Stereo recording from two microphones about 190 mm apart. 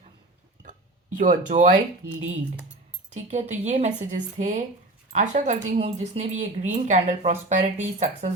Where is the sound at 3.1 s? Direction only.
40° right (ahead or behind).